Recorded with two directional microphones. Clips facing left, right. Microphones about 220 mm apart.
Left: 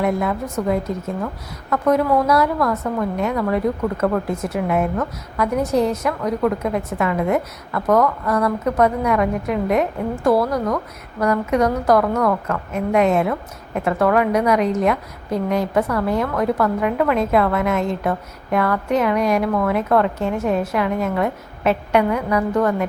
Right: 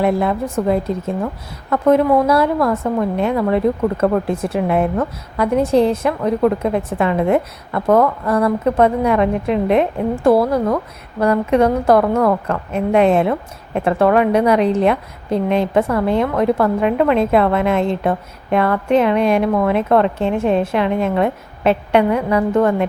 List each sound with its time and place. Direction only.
0.0 s a woman's voice: 30° right (ahead or behind)